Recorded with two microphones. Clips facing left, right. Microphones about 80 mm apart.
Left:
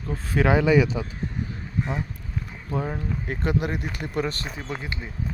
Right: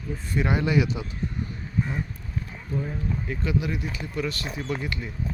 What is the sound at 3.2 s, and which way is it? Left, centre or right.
Speech, left.